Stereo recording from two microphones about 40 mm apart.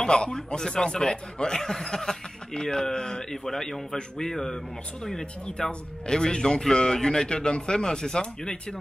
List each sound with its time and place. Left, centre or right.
0.0 s speech: left